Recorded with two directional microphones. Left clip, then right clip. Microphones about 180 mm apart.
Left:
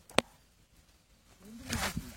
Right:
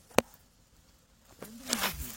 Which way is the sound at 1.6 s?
45° right (ahead or behind).